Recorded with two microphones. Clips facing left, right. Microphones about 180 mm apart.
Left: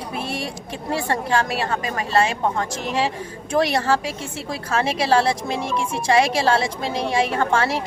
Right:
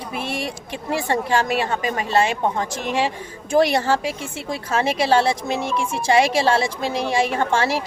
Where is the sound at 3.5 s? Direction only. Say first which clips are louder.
Right 3 dB; centre (ahead or behind).